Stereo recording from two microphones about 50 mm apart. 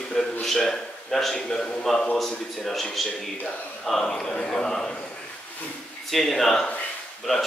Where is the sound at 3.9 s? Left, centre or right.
Centre.